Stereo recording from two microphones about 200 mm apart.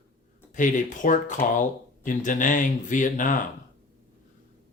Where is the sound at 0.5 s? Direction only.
40° left (ahead or behind).